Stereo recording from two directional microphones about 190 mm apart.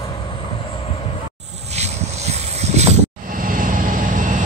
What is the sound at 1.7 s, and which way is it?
Vehicle, 35° right (ahead or behind).